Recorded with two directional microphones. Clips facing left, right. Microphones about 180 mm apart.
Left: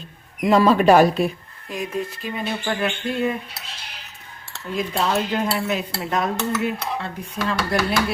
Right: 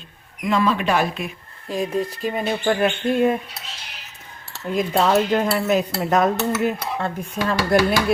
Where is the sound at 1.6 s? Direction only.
30° right (ahead or behind).